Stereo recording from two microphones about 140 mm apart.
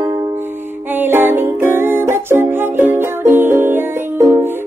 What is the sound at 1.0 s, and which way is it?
Music, 15° right (ahead or behind).